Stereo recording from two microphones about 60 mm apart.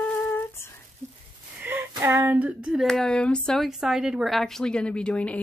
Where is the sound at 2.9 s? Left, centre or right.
Centre.